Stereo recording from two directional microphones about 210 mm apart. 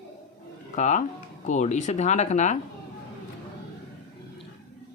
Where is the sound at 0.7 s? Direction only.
35° left (ahead or behind).